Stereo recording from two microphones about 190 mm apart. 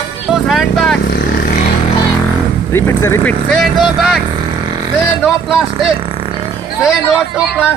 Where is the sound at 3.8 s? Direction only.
Centre (ahead or behind).